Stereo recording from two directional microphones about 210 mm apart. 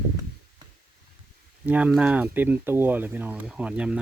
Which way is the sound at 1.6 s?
5° right (ahead or behind).